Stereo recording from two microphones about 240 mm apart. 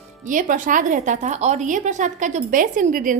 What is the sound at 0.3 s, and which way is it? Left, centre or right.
A woman's voice, right.